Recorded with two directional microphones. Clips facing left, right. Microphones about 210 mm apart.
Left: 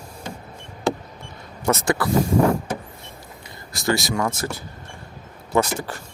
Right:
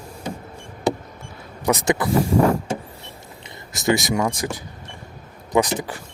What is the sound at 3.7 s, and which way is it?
Speech, 20° right (ahead or behind).